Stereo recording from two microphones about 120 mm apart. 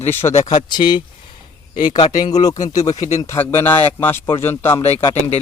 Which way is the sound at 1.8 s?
90° left.